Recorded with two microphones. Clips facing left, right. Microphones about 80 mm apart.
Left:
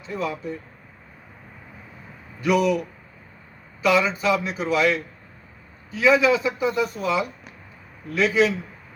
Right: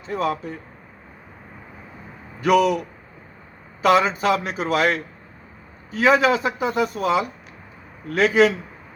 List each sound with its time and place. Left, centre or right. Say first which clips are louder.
0.1 s a man's voice: right 4 dB; right
2.4 s a man's voice: right 3 dB; right
3.8 s a man's voice: right 3 dB; right